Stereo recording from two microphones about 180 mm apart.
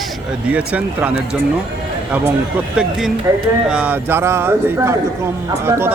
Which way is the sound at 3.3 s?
15° right (ahead or behind).